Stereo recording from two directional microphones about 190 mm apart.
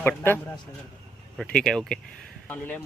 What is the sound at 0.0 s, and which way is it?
Speech, 10° left (ahead or behind).